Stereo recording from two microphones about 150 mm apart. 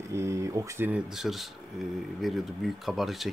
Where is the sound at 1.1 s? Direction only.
Centre (ahead or behind).